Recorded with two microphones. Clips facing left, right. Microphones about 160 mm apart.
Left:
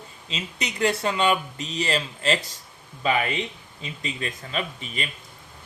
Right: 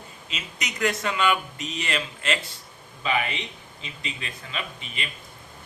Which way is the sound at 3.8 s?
45° left (ahead or behind).